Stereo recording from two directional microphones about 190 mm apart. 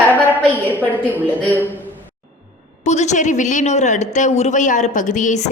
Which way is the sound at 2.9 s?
35° left (ahead or behind).